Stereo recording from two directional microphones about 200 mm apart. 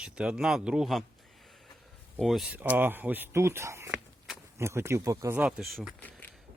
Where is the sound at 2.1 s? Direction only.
Centre (ahead or behind).